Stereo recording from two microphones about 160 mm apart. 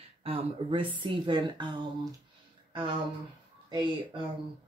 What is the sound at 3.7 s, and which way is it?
Speech, 30° right (ahead or behind).